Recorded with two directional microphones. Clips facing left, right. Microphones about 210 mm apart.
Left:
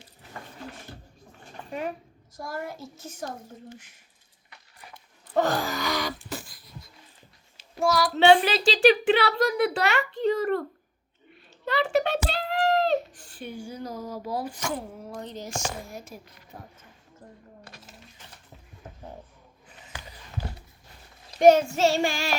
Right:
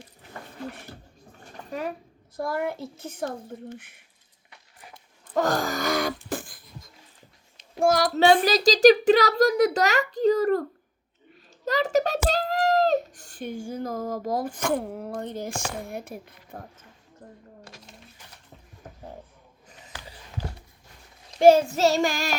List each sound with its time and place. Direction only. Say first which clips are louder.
2.3 s a woman's voice: right 7 dB; 60° right (ahead or behind)
5.3 s a sound: right 1 dB; 45° right (ahead or behind)
7.8 s speech: right 2 dB; 50° right (ahead or behind)
11.6 s a child's voice: right 1 dB; 40° right (ahead or behind); by 16.6 s 55° right (ahead or behind)
17.7 s a sound: right 1 dB; 5° left (ahead or behind)
21.3 s child singing: right 1 dB; 30° right (ahead or behind)
21.8 s speech: right 1 dB; 40° right (ahead or behind)